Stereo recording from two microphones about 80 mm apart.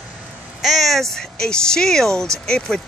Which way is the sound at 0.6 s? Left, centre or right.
Centre.